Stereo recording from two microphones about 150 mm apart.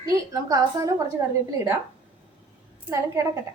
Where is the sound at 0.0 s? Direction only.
25° right (ahead or behind).